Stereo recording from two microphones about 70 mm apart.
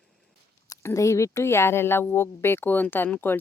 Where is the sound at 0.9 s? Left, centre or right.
Left.